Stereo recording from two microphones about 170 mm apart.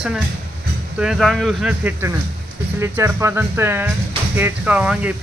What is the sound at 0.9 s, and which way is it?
Speech, 5° right (ahead or behind).